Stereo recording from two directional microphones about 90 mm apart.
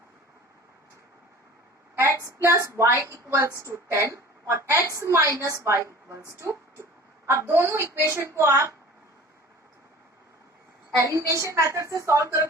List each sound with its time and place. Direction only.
2.2 s a woman's voice: 35° right (ahead or behind)
10.9 s a woman's voice: 35° right (ahead or behind)